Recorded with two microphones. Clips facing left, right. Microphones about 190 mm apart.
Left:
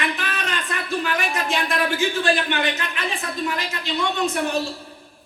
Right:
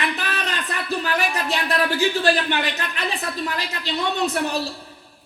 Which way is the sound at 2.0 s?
35° right (ahead or behind).